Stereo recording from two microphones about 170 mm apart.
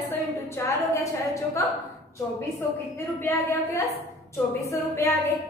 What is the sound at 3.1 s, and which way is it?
A woman's voice, 15° left (ahead or behind).